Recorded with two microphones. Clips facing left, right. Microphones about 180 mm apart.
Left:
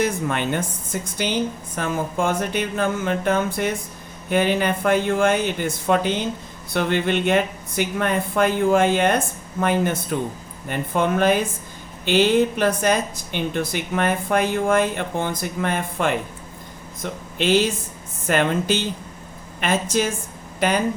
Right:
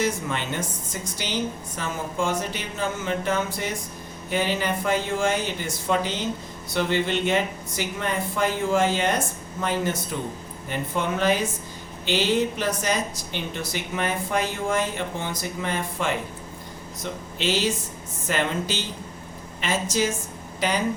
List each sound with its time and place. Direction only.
0.0 s speech: 55° left (ahead or behind)